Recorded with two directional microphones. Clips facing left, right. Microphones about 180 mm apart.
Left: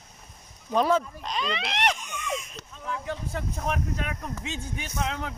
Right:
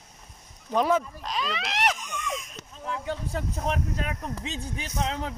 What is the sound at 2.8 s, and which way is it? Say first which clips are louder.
Speech: right 1 dB; 30° right (ahead or behind).